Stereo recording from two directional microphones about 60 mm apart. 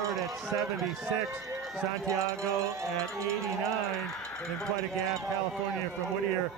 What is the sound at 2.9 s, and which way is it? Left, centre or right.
Speech, centre.